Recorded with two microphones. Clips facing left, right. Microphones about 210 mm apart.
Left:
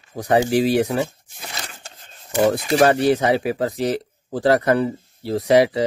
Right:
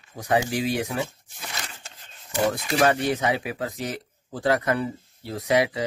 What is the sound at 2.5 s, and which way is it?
Speech, 35° left (ahead or behind).